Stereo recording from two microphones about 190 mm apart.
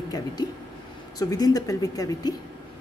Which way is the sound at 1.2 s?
20° left (ahead or behind).